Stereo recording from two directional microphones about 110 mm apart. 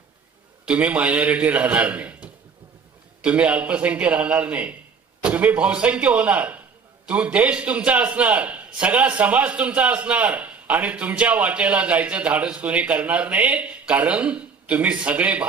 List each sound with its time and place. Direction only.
0.6 s a man's voice: 10° right (ahead or behind)